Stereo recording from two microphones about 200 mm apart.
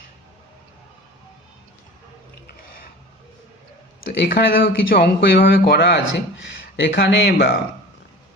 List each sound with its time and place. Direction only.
4.2 s speech: 50° left (ahead or behind)